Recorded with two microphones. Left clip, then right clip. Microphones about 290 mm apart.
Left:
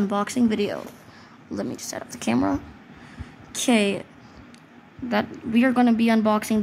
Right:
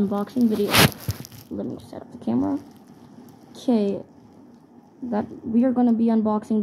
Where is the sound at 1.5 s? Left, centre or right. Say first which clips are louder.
Left 2 dB; left.